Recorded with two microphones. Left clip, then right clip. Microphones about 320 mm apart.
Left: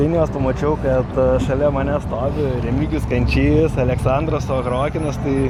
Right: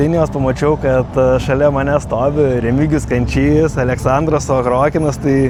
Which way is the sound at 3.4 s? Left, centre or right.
Right.